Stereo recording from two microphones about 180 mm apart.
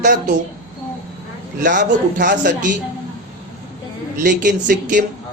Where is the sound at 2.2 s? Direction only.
45° right (ahead or behind).